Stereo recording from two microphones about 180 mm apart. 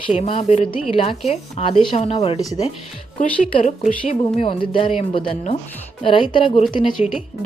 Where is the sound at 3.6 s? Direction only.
40° left (ahead or behind).